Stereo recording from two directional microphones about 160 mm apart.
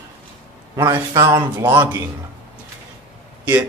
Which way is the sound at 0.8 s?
20° right (ahead or behind).